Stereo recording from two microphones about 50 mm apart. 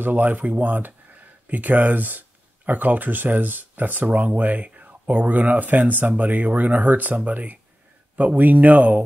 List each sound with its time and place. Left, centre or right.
0.0 s speech: right